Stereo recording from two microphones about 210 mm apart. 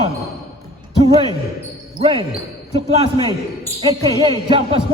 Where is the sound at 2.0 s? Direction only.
25° right (ahead or behind).